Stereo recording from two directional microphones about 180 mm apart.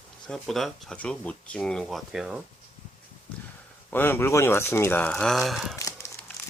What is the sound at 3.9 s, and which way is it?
Speech, 10° left (ahead or behind).